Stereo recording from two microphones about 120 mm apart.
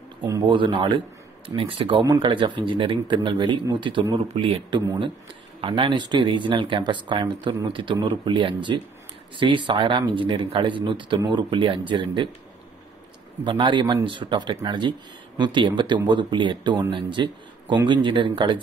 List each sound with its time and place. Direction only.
0.5 s speech: 45° right (ahead or behind)
13.4 s a man's voice: 40° right (ahead or behind)